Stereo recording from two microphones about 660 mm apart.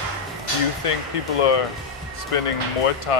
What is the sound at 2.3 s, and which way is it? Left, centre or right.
Speech, left.